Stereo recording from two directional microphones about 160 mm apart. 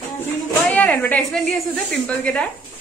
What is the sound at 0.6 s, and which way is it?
A woman's voice, 10° left (ahead or behind).